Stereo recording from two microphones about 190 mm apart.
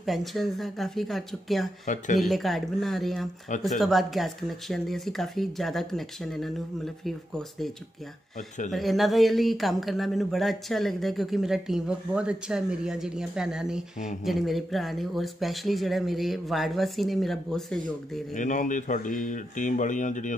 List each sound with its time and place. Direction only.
0.0 s speech: centre (ahead or behind)
8.7 s speech: centre (ahead or behind)
18.3 s speech: 40° left (ahead or behind)